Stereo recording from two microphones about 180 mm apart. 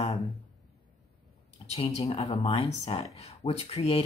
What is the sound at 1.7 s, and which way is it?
Speech, 35° left (ahead or behind).